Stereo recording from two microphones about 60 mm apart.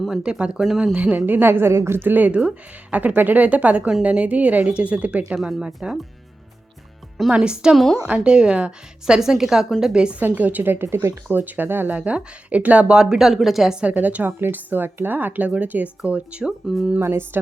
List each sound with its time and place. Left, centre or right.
0.2 s a woman's voice: centre
0.9 s speech: right
2.0 s a woman's voice: right
5.3 s a woman's voice: centre
7.2 s a woman's voice: centre
10.2 s speech: right
11.9 s a woman's voice: right
13.0 s a woman's voice: centre; by 14.3 s right
14.3 s a woman's voice: right
16.5 s speech: centre
17.0 s speech: right